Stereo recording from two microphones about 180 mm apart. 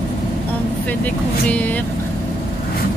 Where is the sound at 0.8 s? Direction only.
10° left (ahead or behind).